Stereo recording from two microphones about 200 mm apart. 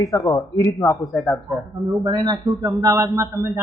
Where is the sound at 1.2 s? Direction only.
Centre (ahead or behind).